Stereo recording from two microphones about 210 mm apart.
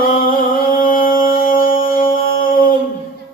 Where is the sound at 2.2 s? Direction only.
40° left (ahead or behind).